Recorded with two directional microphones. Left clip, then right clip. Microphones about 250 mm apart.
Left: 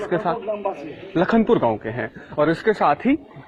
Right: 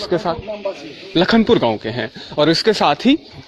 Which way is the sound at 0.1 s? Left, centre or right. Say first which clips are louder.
Right 2 dB; right.